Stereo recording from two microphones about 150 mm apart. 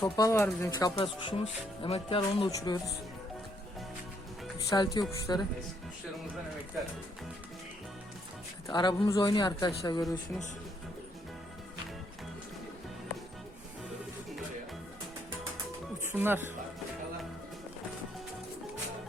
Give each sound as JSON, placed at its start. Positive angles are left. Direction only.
{"t": 0.0, "sound": "speech", "side_deg": 20}
{"t": 4.5, "sound": "speech", "side_deg": 25}
{"t": 8.6, "sound": "speech", "side_deg": 30}
{"t": 16.0, "sound": "speech", "side_deg": -15}